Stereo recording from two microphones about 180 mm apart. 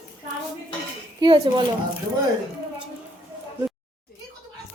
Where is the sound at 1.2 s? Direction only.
25° right (ahead or behind).